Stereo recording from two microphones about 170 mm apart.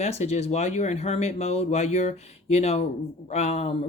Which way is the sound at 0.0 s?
40° left (ahead or behind).